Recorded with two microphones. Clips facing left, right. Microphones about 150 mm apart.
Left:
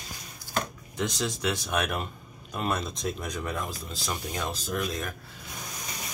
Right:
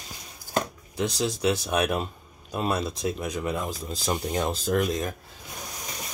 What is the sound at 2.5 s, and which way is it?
Speech, 10° right (ahead or behind).